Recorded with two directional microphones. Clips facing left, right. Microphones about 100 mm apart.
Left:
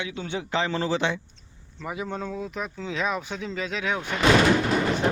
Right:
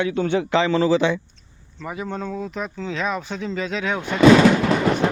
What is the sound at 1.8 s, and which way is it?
Speech, 10° left (ahead or behind).